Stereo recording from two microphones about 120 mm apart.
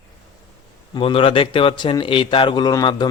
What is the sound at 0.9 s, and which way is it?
Speech, 50° left (ahead or behind).